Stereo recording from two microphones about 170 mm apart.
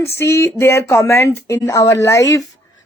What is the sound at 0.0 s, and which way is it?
Speech, 15° left (ahead or behind).